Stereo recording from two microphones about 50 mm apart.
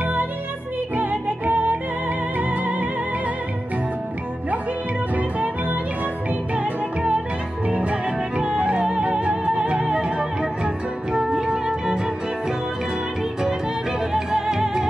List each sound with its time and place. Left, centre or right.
0.0 s music: right
5.1 s music: right
7.6 s music: right
14.1 s music: centre